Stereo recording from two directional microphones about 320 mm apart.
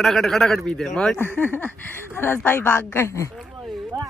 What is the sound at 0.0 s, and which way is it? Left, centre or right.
Speech, centre.